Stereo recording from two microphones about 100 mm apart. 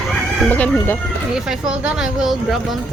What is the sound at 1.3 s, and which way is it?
Speech, 5° right (ahead or behind).